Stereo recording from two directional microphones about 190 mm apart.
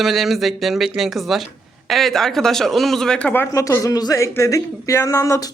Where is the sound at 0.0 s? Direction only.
Centre (ahead or behind).